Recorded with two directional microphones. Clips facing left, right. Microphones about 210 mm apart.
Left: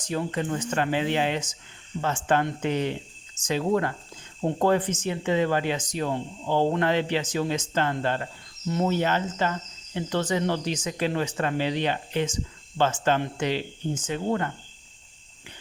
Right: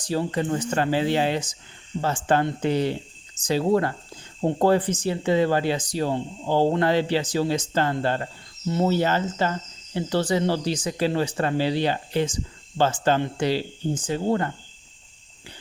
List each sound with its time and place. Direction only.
0.0 s speech: 35° right (ahead or behind)